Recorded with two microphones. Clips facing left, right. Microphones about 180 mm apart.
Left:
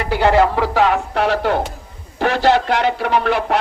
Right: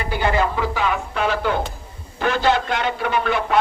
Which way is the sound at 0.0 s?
75° left (ahead or behind).